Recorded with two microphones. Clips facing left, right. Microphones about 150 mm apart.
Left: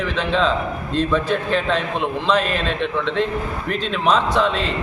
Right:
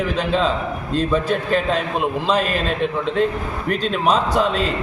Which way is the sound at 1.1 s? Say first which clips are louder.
Right 2 dB; 40° right (ahead or behind).